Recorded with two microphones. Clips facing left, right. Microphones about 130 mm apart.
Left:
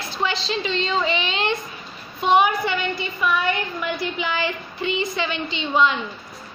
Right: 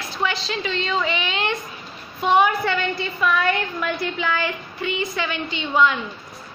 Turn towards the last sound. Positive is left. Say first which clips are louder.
# even
turn(degrees=25)  # may be behind; listen again after turning